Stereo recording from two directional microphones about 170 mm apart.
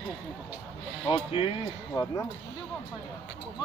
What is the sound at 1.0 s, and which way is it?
Speech, 35° left (ahead or behind).